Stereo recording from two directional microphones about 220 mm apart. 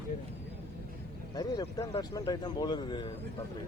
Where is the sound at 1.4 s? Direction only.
15° left (ahead or behind).